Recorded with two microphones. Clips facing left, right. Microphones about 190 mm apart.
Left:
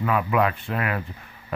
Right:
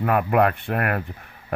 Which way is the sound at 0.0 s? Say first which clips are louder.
Right 3 dB; 55° right (ahead or behind).